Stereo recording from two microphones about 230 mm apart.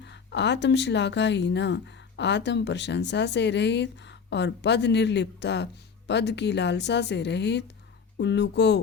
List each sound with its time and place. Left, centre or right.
0.0 s speech: left